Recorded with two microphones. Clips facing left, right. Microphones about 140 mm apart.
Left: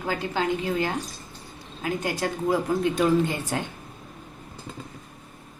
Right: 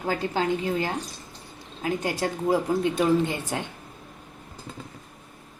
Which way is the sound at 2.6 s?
20° right (ahead or behind).